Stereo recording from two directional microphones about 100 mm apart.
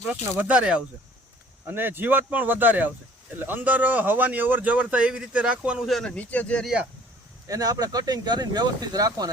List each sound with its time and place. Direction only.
0.1 s speech: 15° right (ahead or behind)
5.9 s speech: 10° left (ahead or behind)
7.4 s speech: 40° right (ahead or behind)